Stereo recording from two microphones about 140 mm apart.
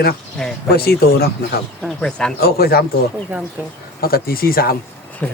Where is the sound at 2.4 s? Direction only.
90° left.